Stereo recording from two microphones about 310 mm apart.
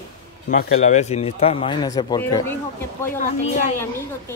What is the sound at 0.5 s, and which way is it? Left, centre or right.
Speech, left.